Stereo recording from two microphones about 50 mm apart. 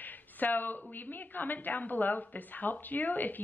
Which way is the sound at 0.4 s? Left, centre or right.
Left.